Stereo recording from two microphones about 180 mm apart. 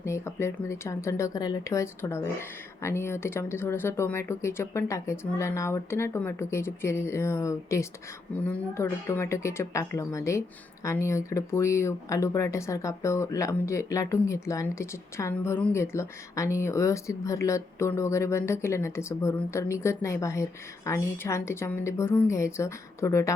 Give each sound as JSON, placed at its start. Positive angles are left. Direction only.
{"t": 0.0, "sound": "speech", "side_deg": 15}